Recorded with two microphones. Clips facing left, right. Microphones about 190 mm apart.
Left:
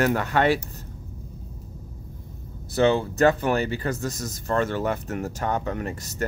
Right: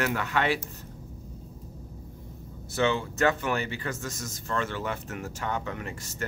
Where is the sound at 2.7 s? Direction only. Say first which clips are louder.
Left 6 dB; 35° left (ahead or behind).